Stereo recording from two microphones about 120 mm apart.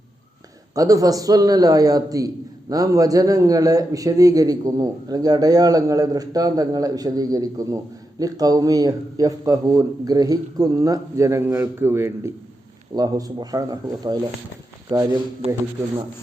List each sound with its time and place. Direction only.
0.8 s a man's voice: 30° right (ahead or behind)
13.0 s a man's voice: 30° right (ahead or behind)